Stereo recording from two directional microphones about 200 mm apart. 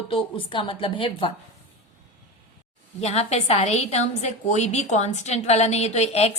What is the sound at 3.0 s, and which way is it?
A woman's voice, 30° left (ahead or behind).